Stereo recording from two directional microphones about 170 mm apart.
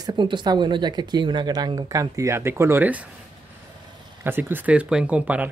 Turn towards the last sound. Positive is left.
turn(degrees=-10)  # may be behind; listen again after turning